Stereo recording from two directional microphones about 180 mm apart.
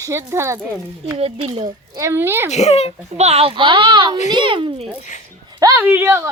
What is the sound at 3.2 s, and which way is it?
A child's voice, 35° right (ahead or behind).